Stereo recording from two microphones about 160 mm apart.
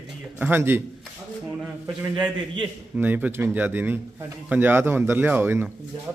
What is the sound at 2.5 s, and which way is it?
A man's voice, 10° right (ahead or behind).